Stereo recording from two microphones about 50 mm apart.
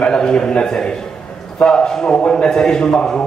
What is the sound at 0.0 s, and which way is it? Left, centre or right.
A man's voice, centre.